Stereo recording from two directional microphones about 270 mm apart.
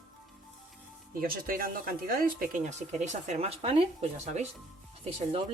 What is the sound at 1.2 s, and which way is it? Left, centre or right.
Speech, right.